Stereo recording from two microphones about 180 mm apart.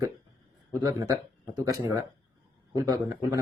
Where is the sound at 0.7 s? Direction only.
20° right (ahead or behind).